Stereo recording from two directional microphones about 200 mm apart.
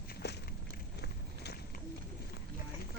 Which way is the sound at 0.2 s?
55° left (ahead or behind).